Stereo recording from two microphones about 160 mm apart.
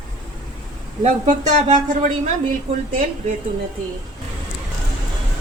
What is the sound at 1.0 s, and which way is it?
A woman's voice, 45° right (ahead or behind).